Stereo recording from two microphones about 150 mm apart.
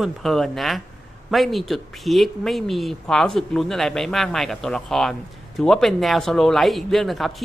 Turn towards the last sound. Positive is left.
turn(degrees=0)  # may be behind; listen again after turning